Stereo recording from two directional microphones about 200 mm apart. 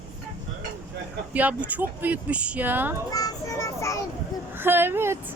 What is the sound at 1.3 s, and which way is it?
Speech, 5° right (ahead or behind).